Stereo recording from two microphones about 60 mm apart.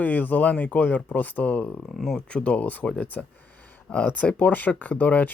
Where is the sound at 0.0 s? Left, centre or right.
Left.